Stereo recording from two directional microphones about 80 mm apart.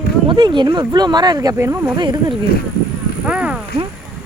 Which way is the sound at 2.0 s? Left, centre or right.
Right.